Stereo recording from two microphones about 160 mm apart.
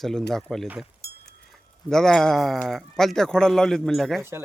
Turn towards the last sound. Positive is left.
turn(degrees=0)  # may be behind; listen again after turning